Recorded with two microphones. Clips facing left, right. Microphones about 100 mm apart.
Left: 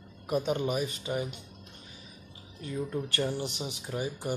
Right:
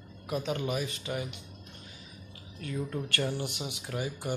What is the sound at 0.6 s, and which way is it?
Speech, 35° left (ahead or behind).